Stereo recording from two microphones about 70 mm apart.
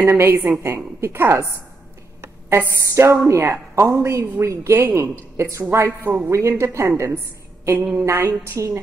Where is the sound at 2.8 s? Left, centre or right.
Right.